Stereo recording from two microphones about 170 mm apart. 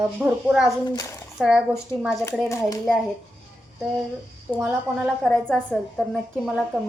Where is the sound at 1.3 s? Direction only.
Centre (ahead or behind).